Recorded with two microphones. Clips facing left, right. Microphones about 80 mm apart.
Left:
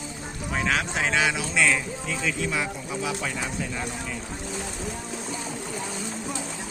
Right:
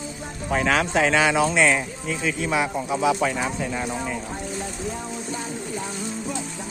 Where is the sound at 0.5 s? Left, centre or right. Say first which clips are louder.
Right 6 dB; right.